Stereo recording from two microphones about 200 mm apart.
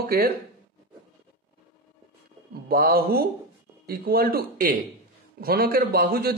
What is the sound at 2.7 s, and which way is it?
A man's voice, 50° right (ahead or behind).